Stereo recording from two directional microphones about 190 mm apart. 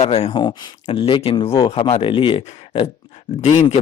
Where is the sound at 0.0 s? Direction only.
35° left (ahead or behind).